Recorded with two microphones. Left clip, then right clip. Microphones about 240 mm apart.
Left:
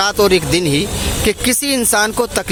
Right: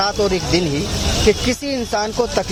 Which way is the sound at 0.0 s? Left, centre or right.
Left.